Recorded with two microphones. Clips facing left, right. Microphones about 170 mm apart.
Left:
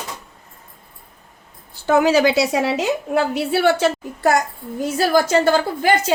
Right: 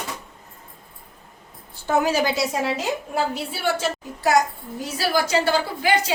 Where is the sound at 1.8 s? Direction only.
85° left.